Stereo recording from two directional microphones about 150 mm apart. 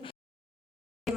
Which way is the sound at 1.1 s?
Centre (ahead or behind).